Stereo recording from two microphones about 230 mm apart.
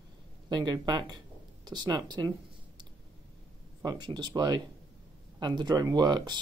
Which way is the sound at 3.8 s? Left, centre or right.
Centre.